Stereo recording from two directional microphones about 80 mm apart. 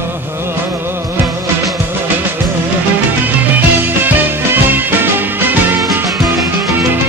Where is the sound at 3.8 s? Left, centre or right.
Right.